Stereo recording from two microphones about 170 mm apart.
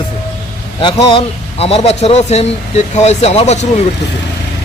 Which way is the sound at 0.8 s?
30° left (ahead or behind).